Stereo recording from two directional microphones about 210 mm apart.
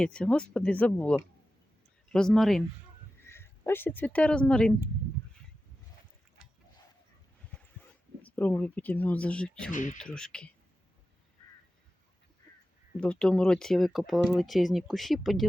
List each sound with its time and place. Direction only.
0.0 s speech: 5° left (ahead or behind)
3.2 s speech: 10° left (ahead or behind)
8.2 s speech: 10° left (ahead or behind)
9.7 s speech: 40° left (ahead or behind)
10.0 s speech: 5° left (ahead or behind)
13.0 s speech: 5° left (ahead or behind)